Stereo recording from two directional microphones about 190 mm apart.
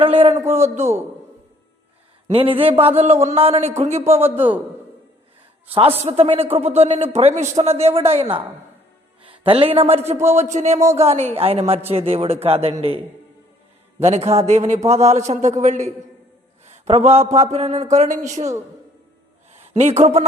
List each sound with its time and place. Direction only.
0.0 s speech: 30° right (ahead or behind)
2.2 s a man's voice: 30° right (ahead or behind)
4.2 s a man's voice: 10° right (ahead or behind)
6.0 s speech: 30° right (ahead or behind)
14.0 s a man's voice: 35° right (ahead or behind)
19.5 s speech: 35° right (ahead or behind)